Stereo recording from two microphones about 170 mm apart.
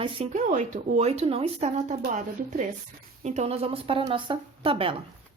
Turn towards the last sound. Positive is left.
turn(degrees=-30)  # may be behind; listen again after turning